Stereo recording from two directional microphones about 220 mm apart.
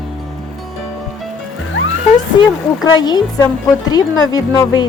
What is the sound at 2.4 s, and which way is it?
Speech, 20° left (ahead or behind).